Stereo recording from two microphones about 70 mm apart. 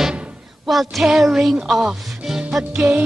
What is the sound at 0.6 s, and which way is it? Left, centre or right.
Child singing, centre.